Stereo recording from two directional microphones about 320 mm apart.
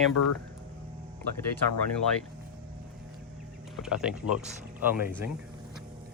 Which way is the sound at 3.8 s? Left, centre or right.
Centre.